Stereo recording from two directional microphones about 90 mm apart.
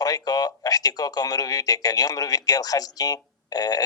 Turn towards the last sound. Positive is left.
turn(degrees=45)  # may be behind; listen again after turning